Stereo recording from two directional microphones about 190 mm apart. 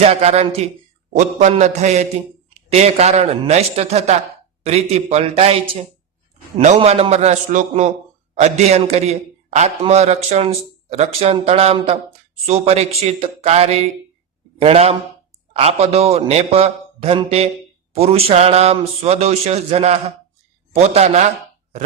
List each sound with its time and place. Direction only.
0.0 s a man's voice: 35° right (ahead or behind)